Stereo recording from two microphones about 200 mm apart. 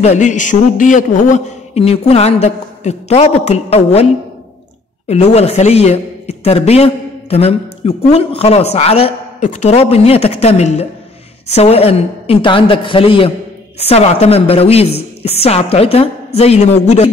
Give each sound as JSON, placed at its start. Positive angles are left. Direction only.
{"t": 0.0, "sound": "a man's voice", "side_deg": 35}